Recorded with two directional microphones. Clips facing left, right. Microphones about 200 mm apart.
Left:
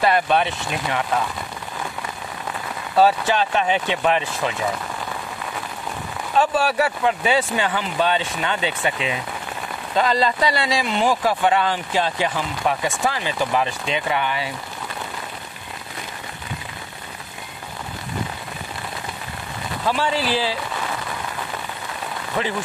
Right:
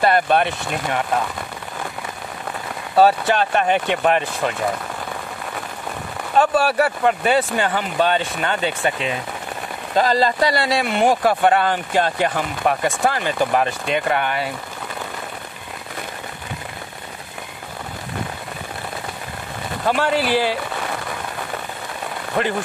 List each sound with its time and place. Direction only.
0.0 s speech: 50° right (ahead or behind)
3.0 s speech: 55° right (ahead or behind)
6.3 s speech: 55° right (ahead or behind)
19.9 s speech: 55° right (ahead or behind)
22.4 s speech: 50° right (ahead or behind)